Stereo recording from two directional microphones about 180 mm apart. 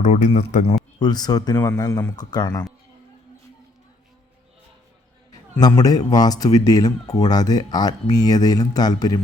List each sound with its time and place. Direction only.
0.0 s speech: 40° left (ahead or behind)
0.9 s speech: 25° left (ahead or behind)
5.3 s speech: 20° left (ahead or behind)